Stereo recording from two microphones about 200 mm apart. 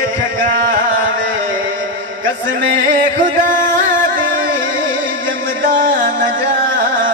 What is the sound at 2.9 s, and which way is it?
Music, 40° right (ahead or behind).